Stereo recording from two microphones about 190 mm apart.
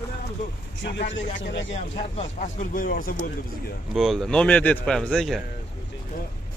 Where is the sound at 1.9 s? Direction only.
30° left (ahead or behind); by 3.3 s 50° left (ahead or behind).